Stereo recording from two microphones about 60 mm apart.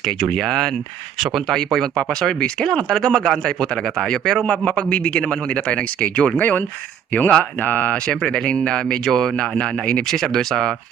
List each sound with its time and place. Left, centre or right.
0.0 s speech: centre
4.5 s speech: left